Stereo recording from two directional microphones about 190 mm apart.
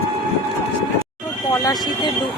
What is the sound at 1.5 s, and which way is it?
Speech, 20° left (ahead or behind).